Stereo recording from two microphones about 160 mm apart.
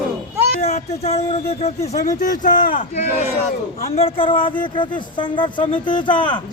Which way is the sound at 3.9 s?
35° left (ahead or behind).